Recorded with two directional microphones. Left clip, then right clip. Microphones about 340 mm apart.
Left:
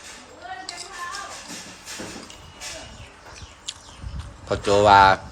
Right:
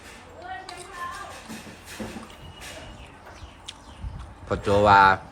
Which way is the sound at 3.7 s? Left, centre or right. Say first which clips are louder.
Left 6 dB; centre.